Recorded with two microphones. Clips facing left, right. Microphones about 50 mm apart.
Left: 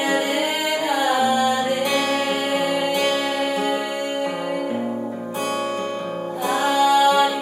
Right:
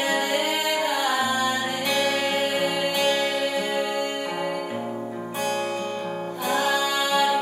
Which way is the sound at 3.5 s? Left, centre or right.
Left.